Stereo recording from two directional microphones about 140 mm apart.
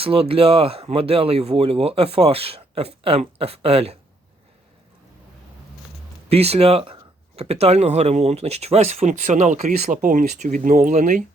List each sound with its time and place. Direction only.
0.0 s speech: 40° right (ahead or behind)
6.2 s speech: 45° right (ahead or behind); by 11.2 s 65° right (ahead or behind)